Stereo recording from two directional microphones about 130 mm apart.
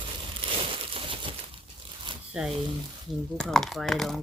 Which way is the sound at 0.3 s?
45° right (ahead or behind).